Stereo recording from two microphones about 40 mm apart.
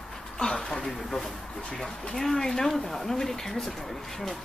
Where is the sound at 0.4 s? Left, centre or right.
Centre.